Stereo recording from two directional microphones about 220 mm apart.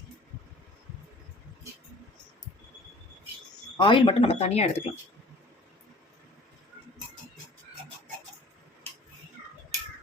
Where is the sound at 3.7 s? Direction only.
20° left (ahead or behind).